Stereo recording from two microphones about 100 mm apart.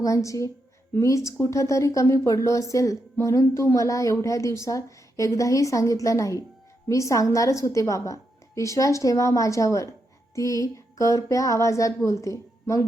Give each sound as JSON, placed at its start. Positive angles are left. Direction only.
{"t": 0.0, "sound": "a woman's voice", "side_deg": 30}